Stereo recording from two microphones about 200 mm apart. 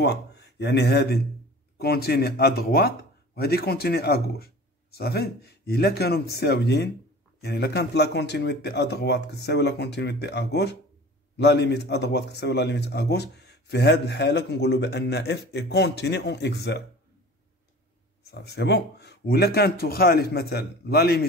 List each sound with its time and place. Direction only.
0.0 s speech: 55° left (ahead or behind)
18.2 s speech: 55° left (ahead or behind)